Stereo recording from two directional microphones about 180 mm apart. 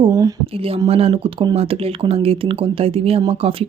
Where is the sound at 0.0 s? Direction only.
20° right (ahead or behind).